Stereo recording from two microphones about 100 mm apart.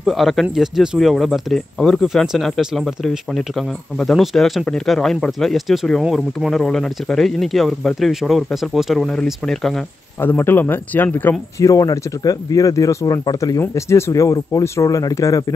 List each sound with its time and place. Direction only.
0.0 s speech: centre (ahead or behind)
10.2 s speech: 20° left (ahead or behind)
11.6 s speech: 35° left (ahead or behind)